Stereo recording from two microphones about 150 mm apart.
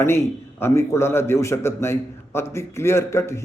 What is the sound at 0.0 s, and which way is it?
A man's voice, 15° left (ahead or behind).